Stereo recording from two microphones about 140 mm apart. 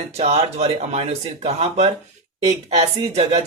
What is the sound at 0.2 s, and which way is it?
Speech, 50° right (ahead or behind).